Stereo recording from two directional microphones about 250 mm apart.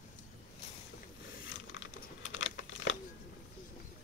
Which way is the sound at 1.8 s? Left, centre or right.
Left.